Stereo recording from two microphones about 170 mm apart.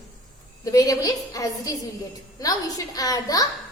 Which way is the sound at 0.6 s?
20° left (ahead or behind).